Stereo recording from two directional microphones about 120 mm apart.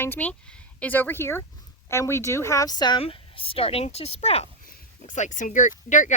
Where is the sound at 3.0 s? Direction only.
50° left (ahead or behind).